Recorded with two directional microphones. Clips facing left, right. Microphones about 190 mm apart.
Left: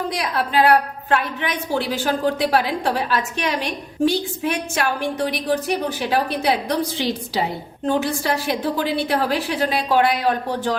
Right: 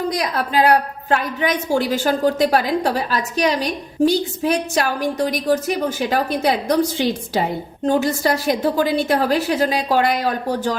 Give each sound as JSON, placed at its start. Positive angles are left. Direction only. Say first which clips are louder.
{"t": 0.1, "sound": "a woman's voice", "louder": "right 1 dB", "side_deg": -40}